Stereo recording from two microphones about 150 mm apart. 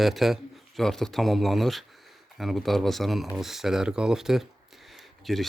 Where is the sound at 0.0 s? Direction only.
Centre (ahead or behind).